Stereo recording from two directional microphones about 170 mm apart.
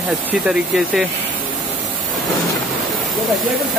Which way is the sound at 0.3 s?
Centre (ahead or behind).